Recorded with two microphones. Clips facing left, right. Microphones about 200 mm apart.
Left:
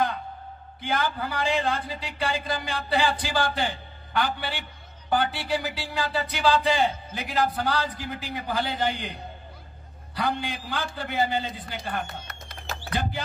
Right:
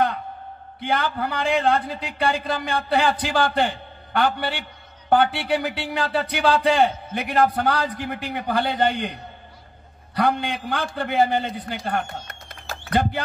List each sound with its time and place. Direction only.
0.7 s speech: 60° right (ahead or behind)
10.1 s speech: 60° right (ahead or behind)